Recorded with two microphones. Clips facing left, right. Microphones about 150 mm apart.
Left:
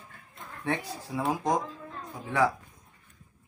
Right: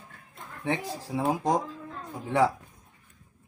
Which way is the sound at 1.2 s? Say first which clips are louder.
Right 2 dB; 30° right (ahead or behind).